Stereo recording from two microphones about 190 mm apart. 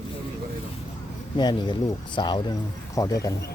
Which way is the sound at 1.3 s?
20° left (ahead or behind).